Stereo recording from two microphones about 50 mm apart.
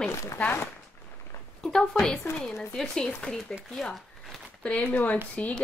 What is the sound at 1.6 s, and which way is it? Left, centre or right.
Speech, centre.